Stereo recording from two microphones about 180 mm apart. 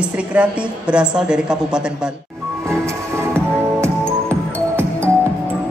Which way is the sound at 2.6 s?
15° right (ahead or behind).